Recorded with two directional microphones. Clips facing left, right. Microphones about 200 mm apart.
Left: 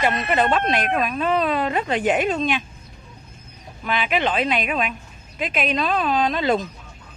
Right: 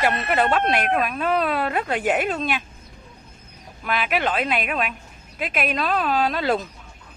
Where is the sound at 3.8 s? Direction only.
5° right (ahead or behind).